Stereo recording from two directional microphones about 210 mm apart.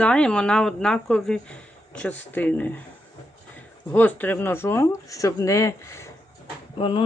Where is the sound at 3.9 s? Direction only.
10° left (ahead or behind).